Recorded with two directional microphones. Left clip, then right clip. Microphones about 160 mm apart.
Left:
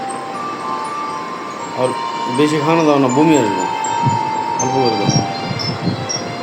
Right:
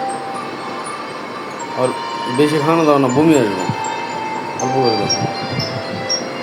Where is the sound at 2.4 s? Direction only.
5° right (ahead or behind).